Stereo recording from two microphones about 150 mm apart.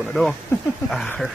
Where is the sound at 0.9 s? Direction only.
Centre (ahead or behind).